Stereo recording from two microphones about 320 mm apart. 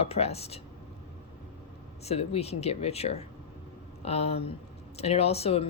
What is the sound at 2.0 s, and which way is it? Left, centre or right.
Speech, centre.